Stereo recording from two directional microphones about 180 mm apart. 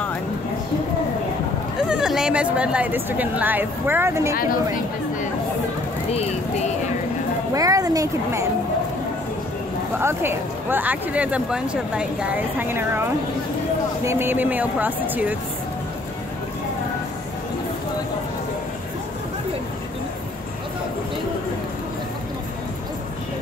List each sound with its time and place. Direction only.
1.9 s speech: 5° right (ahead or behind)
7.5 s speech: 20° right (ahead or behind)
9.9 s speech: 10° right (ahead or behind)
14.0 s speech: 15° right (ahead or behind)